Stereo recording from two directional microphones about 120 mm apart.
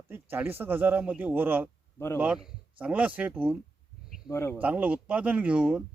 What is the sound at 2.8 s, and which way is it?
Speech, 10° right (ahead or behind).